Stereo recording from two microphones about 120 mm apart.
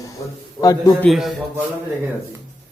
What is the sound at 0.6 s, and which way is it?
Speech, 30° left (ahead or behind).